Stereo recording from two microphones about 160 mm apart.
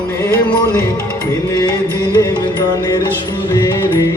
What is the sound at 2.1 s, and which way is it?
Music, 20° left (ahead or behind).